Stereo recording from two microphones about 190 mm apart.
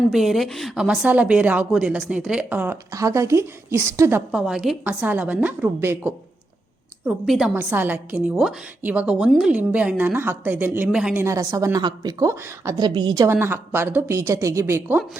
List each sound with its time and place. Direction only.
0.1 s a woman's voice: centre (ahead or behind)